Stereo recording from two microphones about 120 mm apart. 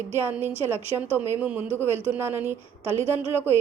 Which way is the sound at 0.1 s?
20° right (ahead or behind).